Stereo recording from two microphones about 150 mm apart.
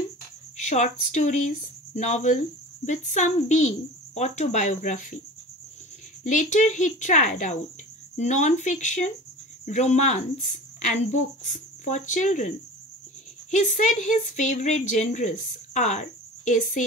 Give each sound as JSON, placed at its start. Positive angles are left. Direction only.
{"t": 0.6, "sound": "a woman's voice", "side_deg": 50}
{"t": 6.2, "sound": "a woman's voice", "side_deg": 55}